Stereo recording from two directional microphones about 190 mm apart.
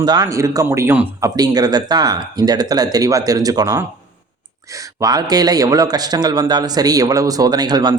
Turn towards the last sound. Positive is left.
turn(degrees=-20)  # may be behind; listen again after turning